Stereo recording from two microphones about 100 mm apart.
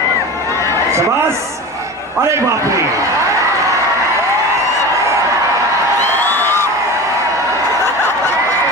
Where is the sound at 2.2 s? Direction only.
30° right (ahead or behind).